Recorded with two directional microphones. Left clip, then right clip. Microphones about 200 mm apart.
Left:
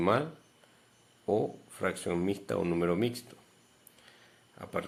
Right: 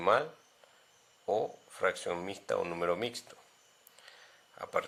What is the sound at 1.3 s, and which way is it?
Speech, 15° right (ahead or behind).